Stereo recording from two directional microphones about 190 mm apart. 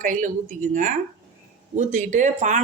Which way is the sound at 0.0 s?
45° right (ahead or behind).